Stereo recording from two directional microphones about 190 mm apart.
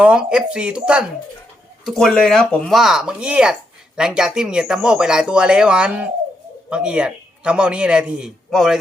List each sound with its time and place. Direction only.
0.0 s a man's voice: 5° right (ahead or behind)